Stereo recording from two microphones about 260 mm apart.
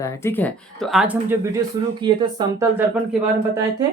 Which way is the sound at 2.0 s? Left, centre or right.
Centre.